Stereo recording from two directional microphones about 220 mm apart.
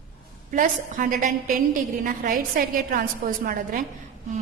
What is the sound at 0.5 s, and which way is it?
A woman's voice, 35° right (ahead or behind).